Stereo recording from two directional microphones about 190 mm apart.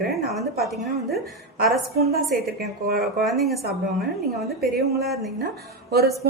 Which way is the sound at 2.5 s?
55° right (ahead or behind).